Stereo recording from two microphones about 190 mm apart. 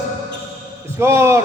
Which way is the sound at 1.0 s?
15° right (ahead or behind).